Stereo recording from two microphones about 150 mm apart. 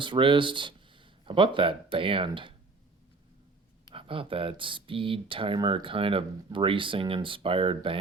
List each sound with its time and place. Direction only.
0.0 s speech: 35° right (ahead or behind)
3.9 s speech: 35° right (ahead or behind)